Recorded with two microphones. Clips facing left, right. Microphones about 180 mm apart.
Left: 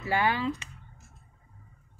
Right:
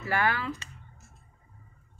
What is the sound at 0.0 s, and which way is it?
Speech, 15° left (ahead or behind).